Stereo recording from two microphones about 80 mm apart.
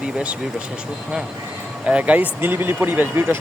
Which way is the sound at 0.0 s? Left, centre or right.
Centre.